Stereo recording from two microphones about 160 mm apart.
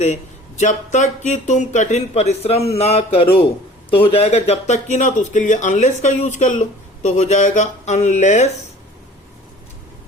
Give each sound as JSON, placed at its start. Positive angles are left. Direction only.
{"t": 0.6, "sound": "speech", "side_deg": 50}